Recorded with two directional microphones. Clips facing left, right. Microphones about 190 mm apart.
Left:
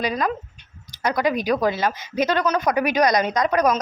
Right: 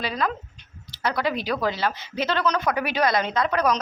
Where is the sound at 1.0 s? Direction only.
15° left (ahead or behind).